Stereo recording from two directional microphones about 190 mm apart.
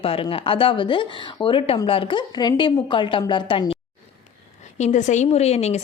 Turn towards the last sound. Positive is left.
turn(degrees=35)  # may be behind; listen again after turning